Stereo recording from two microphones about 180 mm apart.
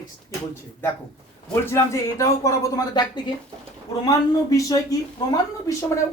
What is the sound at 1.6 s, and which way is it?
A man's voice, 15° left (ahead or behind).